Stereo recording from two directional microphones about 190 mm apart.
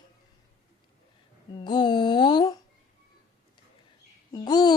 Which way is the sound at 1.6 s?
25° left (ahead or behind).